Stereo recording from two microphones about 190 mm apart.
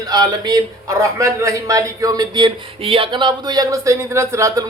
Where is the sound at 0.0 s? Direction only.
20° right (ahead or behind).